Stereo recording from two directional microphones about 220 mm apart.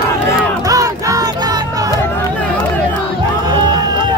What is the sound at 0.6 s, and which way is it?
Music, 15° right (ahead or behind).